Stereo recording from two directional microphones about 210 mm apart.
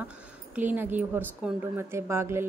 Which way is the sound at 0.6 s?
10° right (ahead or behind).